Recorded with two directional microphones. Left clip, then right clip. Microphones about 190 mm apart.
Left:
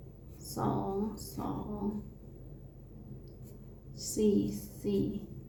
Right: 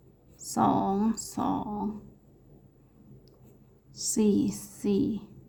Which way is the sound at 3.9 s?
50° right (ahead or behind).